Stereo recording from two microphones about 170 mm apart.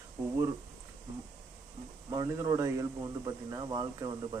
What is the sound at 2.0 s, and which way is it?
Speech, 20° right (ahead or behind).